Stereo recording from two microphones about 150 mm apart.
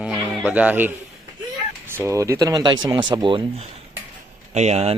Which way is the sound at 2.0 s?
20° right (ahead or behind).